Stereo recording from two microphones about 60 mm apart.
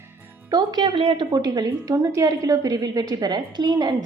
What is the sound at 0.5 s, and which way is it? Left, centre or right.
Speech, right.